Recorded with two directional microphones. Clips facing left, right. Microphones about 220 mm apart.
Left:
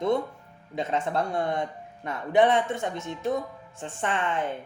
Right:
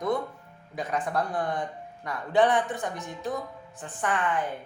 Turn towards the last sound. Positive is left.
turn(degrees=25)  # may be behind; listen again after turning